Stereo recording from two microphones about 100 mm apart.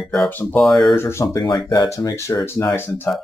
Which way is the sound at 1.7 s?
40° left (ahead or behind).